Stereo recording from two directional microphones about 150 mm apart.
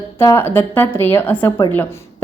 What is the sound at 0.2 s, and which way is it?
Speech, 15° left (ahead or behind).